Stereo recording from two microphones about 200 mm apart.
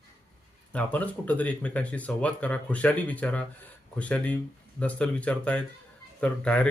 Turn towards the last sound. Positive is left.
turn(degrees=5)  # may be behind; listen again after turning